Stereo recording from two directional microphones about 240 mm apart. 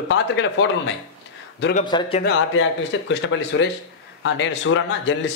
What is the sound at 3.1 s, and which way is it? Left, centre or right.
Speech, left.